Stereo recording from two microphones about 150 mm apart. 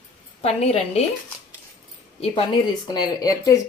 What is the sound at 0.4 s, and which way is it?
Speech, 45° left (ahead or behind).